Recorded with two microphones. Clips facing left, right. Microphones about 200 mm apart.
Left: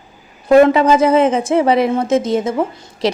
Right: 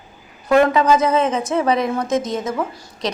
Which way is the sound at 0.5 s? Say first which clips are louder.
Left 5 dB; 25° left (ahead or behind).